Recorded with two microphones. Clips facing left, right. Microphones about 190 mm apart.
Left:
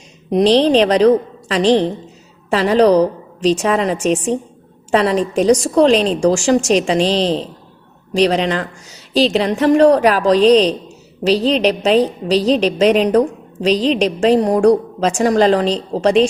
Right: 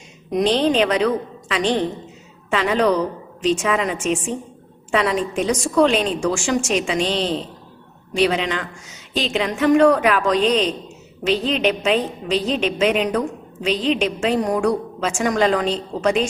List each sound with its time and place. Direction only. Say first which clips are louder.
0.3 s a woman's voice: left 6 dB; 35° left (ahead or behind)